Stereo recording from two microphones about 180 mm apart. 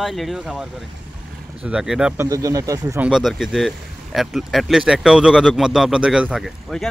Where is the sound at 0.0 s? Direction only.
Centre (ahead or behind).